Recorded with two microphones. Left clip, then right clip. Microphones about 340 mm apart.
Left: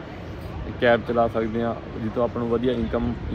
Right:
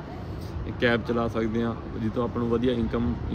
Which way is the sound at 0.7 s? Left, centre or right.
Centre.